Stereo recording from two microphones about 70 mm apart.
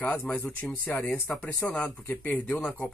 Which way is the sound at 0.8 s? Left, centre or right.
Left.